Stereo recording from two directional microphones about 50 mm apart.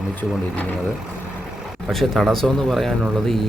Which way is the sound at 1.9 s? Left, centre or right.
Centre.